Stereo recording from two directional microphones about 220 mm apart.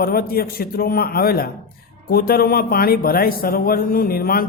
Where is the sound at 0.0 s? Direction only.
45° left (ahead or behind).